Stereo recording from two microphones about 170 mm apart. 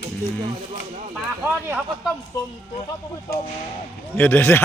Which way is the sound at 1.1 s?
10° right (ahead or behind).